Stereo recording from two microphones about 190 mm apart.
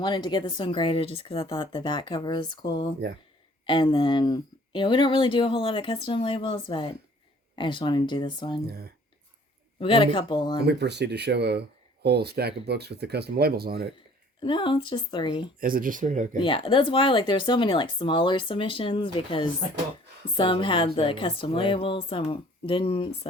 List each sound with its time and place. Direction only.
0.0 s speech: 25° left (ahead or behind)
8.6 s speech: 55° right (ahead or behind)
9.8 s speech: 25° left (ahead or behind)
10.6 s speech: 60° right (ahead or behind)
14.4 s speech: 25° left (ahead or behind)
15.6 s speech: 50° right (ahead or behind)
16.4 s speech: 30° left (ahead or behind)